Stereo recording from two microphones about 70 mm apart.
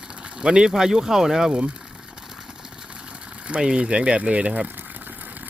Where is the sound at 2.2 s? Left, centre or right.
Centre.